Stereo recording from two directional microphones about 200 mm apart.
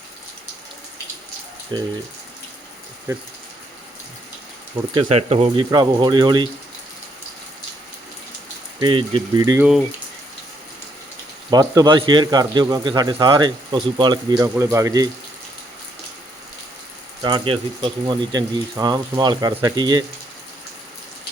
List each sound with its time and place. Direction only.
1.7 s speech: 20° right (ahead or behind)
4.9 s speech: 30° right (ahead or behind)
8.8 s speech: 25° right (ahead or behind)
11.5 s speech: 20° right (ahead or behind)
17.2 s speech: 25° right (ahead or behind)